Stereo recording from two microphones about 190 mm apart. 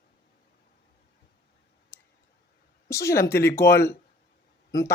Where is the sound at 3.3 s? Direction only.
15° left (ahead or behind).